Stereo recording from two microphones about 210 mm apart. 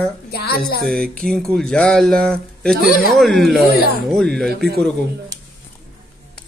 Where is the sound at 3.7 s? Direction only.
45° left (ahead or behind).